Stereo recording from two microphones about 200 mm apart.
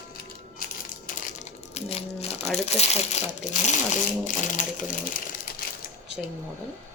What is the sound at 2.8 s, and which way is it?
Speech, 30° left (ahead or behind).